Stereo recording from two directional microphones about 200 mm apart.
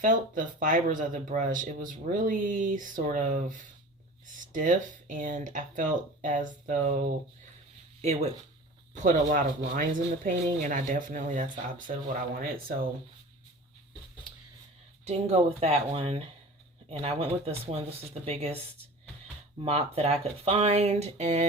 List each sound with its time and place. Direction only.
0.0 s speech: 40° right (ahead or behind)
4.5 s speech: 40° right (ahead or behind)
9.0 s speech: 40° right (ahead or behind)
15.0 s speech: 30° right (ahead or behind)
19.6 s speech: 30° right (ahead or behind)